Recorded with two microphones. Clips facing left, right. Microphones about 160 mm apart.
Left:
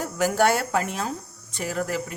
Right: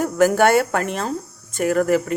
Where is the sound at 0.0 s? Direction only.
55° right (ahead or behind).